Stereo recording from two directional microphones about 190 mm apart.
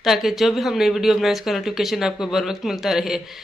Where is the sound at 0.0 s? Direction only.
Centre (ahead or behind).